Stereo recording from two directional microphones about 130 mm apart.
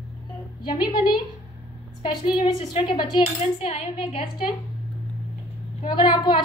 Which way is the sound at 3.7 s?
55° left (ahead or behind).